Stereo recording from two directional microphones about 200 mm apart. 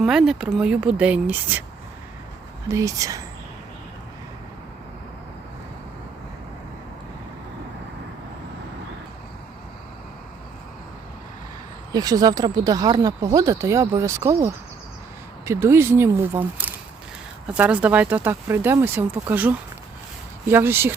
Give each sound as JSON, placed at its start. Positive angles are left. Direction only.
{"t": 0.0, "sound": "speech", "side_deg": -5}
{"t": 2.6, "sound": "speech", "side_deg": -15}
{"t": 11.9, "sound": "speech", "side_deg": -20}